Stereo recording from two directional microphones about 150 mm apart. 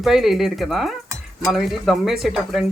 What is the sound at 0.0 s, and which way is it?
Speech, centre (ahead or behind).